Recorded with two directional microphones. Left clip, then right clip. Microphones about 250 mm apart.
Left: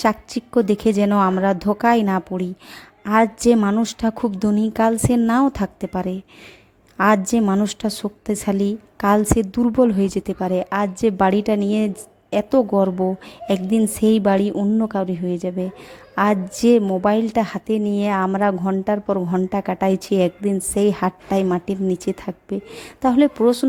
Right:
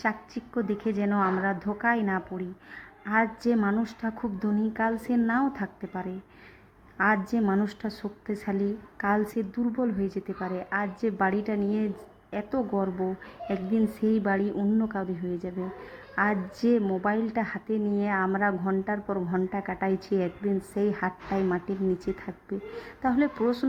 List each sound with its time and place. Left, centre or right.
0.0 s a woman's voice: left